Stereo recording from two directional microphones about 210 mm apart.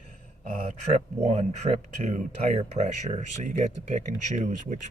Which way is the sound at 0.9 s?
35° right (ahead or behind).